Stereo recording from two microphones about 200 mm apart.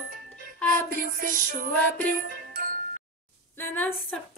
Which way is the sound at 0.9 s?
45° right (ahead or behind).